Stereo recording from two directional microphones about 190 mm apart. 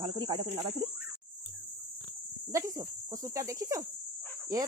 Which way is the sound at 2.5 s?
15° right (ahead or behind).